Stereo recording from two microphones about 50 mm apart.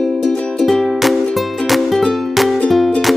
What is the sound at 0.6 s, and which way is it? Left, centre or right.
Music, centre.